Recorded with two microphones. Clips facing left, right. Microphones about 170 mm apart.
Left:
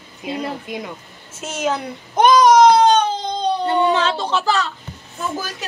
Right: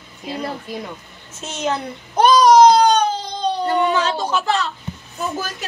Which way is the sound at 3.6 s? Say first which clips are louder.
Left 1 dB; 30° left (ahead or behind).